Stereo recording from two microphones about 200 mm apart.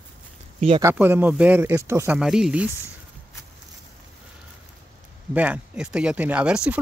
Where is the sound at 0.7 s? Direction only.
10° right (ahead or behind).